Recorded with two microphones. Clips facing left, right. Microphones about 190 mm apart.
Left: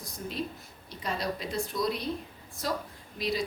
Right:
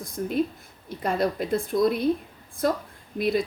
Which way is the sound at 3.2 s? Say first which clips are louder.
Right 7 dB; 55° right (ahead or behind).